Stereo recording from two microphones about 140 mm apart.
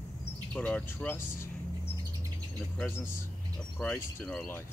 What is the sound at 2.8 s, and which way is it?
Speech, 15° left (ahead or behind).